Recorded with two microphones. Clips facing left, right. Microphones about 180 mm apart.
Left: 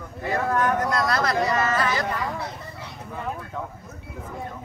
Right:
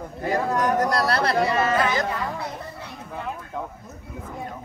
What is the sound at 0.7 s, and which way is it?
Speech, 35° right (ahead or behind).